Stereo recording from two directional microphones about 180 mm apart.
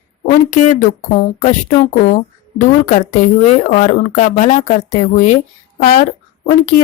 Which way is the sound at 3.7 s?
45° left (ahead or behind).